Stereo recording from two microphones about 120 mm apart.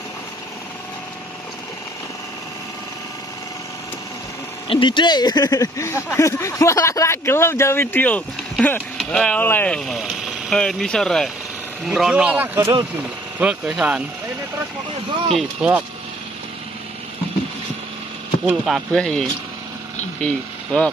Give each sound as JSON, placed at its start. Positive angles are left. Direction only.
{"t": 4.6, "sound": "speech", "side_deg": 45}
{"t": 9.4, "sound": "speech", "side_deg": 15}
{"t": 9.8, "sound": "speech", "side_deg": 0}
{"t": 15.6, "sound": "speech", "side_deg": -5}
{"t": 18.4, "sound": "speech", "side_deg": 0}